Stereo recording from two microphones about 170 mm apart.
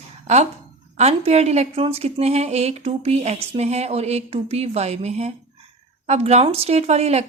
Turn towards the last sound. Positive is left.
turn(degrees=-40)  # may be behind; listen again after turning